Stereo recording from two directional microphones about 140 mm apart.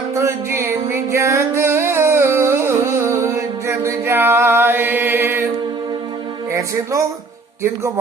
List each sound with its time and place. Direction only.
0.1 s music: 20° right (ahead or behind)
6.5 s speech: 20° right (ahead or behind)